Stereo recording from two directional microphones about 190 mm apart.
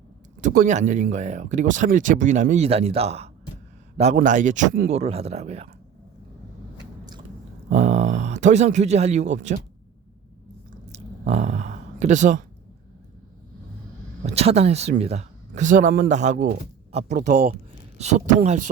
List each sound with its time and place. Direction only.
0.4 s speech: 45° right (ahead or behind)
4.9 s speech: 35° right (ahead or behind)
7.7 s speech: 35° right (ahead or behind)
10.8 s a sound: 35° right (ahead or behind)
14.3 s speech: 35° right (ahead or behind)